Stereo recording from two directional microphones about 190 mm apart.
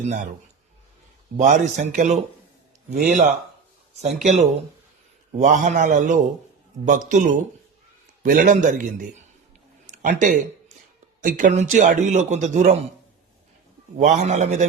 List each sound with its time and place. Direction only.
1.4 s a man's voice: 40° right (ahead or behind)
9.8 s a sound: 40° right (ahead or behind)
11.2 s a man's voice: 45° right (ahead or behind)
14.0 s a man's voice: 40° right (ahead or behind)